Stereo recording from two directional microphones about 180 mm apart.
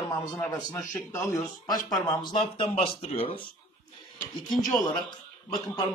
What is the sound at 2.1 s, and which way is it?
Speech, 25° left (ahead or behind).